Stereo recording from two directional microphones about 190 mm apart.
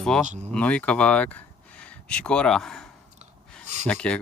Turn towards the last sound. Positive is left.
turn(degrees=5)  # may be behind; listen again after turning